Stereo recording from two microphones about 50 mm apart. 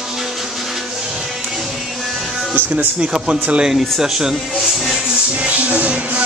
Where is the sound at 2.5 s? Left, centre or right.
Right.